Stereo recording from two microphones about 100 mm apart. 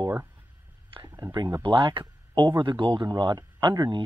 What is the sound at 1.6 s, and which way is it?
Speech, 55° right (ahead or behind).